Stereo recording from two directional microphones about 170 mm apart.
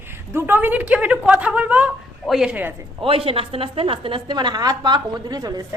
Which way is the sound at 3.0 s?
35° right (ahead or behind).